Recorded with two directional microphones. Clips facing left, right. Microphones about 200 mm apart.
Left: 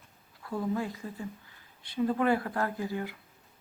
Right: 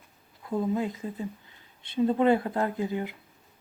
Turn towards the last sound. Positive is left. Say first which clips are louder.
# right 4 dB
turn(degrees=-20)  # may be behind; listen again after turning